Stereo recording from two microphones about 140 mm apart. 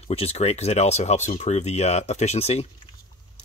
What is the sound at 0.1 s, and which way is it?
Speech, 45° left (ahead or behind).